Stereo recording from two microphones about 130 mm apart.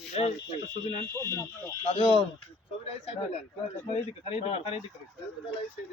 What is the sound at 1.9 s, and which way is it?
Speech, 45° left (ahead or behind).